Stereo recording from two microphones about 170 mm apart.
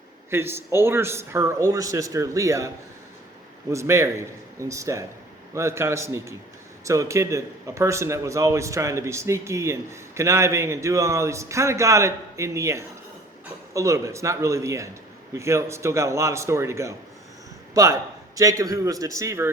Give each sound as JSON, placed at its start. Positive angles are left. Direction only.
{"t": 0.3, "sound": "a man's voice", "side_deg": -15}
{"t": 3.7, "sound": "a man's voice", "side_deg": -15}
{"t": 18.3, "sound": "a man's voice", "side_deg": -20}